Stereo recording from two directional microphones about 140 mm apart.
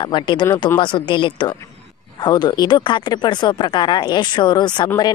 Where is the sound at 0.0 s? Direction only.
35° left (ahead or behind).